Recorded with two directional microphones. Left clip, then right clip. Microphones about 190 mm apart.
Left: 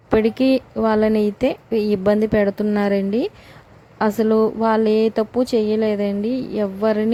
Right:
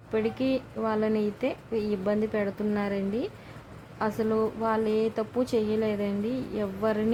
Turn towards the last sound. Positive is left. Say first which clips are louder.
# left 9 dB
turn(degrees=40)  # may be behind; listen again after turning